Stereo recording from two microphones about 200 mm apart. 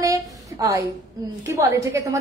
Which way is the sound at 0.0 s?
15° right (ahead or behind).